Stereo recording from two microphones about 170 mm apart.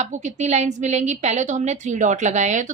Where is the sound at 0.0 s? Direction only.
45° right (ahead or behind).